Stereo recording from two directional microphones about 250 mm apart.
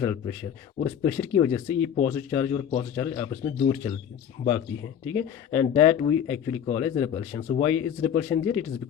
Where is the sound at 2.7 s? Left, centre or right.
Left.